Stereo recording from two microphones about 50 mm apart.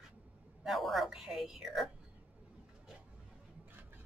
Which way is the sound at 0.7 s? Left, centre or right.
Centre.